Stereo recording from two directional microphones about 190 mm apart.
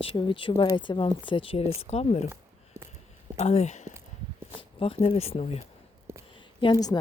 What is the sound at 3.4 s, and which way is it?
Speech, 35° left (ahead or behind).